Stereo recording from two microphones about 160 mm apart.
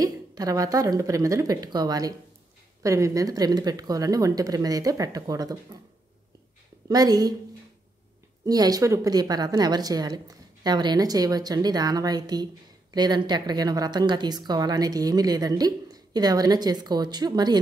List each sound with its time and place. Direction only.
0.0 s speech: 25° right (ahead or behind)
6.9 s speech: 25° right (ahead or behind)
8.5 s speech: 25° right (ahead or behind)